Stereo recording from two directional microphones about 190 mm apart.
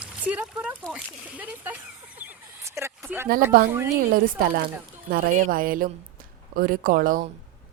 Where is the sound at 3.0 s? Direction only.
10° right (ahead or behind).